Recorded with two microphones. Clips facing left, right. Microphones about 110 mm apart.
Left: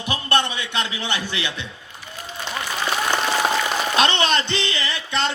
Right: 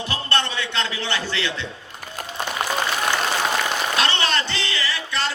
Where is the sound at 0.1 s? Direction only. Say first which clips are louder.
Left 5 dB; 15° left (ahead or behind).